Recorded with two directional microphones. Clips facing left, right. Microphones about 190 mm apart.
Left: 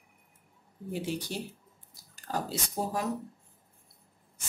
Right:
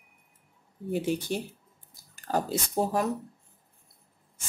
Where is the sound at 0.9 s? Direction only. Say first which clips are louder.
Right 6 dB; 50° right (ahead or behind).